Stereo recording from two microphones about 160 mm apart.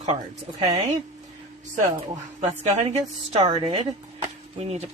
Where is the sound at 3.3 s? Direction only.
40° right (ahead or behind).